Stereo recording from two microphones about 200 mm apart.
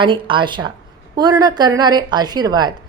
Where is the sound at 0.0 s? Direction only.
25° right (ahead or behind).